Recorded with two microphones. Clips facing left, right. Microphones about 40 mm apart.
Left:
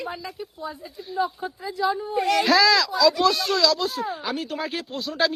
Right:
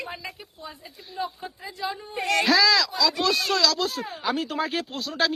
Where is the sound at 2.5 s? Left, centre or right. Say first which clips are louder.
Left 1 dB; left.